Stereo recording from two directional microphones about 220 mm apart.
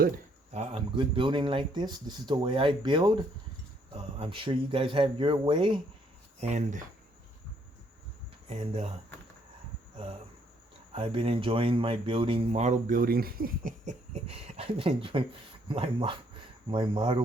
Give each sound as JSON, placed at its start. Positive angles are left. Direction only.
{"t": 0.5, "sound": "speech", "side_deg": -30}
{"t": 8.4, "sound": "speech", "side_deg": -30}
{"t": 10.9, "sound": "speech", "side_deg": -25}